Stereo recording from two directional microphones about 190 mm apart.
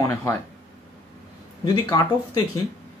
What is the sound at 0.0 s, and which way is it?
Speech, 15° left (ahead or behind).